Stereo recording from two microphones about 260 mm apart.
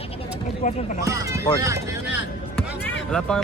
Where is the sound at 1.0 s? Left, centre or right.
Centre.